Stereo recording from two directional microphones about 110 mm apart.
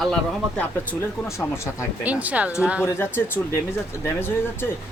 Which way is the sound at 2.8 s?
20° left (ahead or behind).